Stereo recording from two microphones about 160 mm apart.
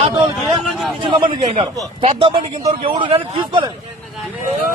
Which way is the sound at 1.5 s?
35° right (ahead or behind).